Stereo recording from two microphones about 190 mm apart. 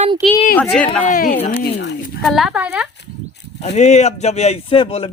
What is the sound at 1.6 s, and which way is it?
Speech, 65° left (ahead or behind).